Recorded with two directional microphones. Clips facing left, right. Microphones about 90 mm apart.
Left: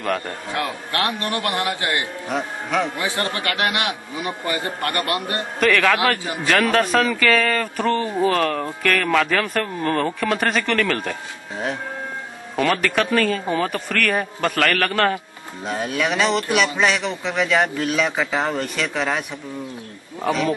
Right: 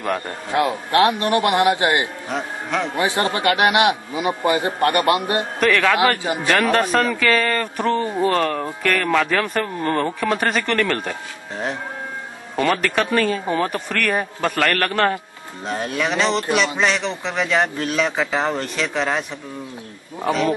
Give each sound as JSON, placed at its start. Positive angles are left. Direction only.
{"t": 0.5, "sound": "a man's voice", "side_deg": -20}
{"t": 2.2, "sound": "speech", "side_deg": 0}
{"t": 3.0, "sound": "a man's voice", "side_deg": -20}
{"t": 5.6, "sound": "a man's voice", "side_deg": 0}
{"t": 5.9, "sound": "a man's voice", "side_deg": -20}
{"t": 6.4, "sound": "a man's voice", "side_deg": 0}
{"t": 12.5, "sound": "a man's voice", "side_deg": 0}
{"t": 20.2, "sound": "a man's voice", "side_deg": 0}